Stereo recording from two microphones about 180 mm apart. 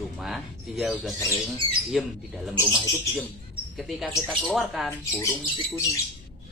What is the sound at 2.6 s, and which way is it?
Speech, 20° left (ahead or behind).